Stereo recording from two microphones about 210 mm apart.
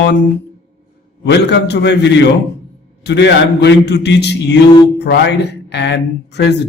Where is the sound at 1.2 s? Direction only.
55° left (ahead or behind).